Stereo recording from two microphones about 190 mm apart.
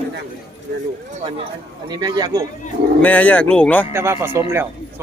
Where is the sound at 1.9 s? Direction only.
20° right (ahead or behind).